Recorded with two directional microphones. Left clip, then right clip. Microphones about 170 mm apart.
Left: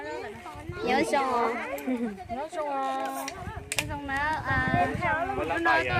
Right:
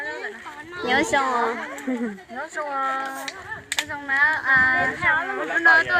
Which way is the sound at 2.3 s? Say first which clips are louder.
Right 3 dB; 5° right (ahead or behind).